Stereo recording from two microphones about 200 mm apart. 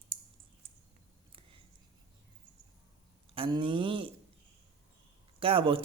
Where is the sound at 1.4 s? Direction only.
25° right (ahead or behind).